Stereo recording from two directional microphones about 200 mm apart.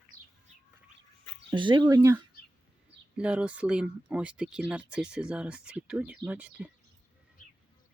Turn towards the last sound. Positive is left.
turn(degrees=-5)  # may be behind; listen again after turning